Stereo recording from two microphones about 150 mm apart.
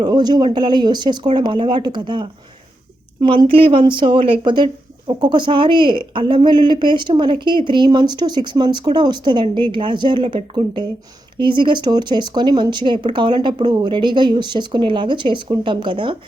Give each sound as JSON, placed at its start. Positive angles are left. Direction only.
{"t": 0.0, "sound": "speech", "side_deg": -30}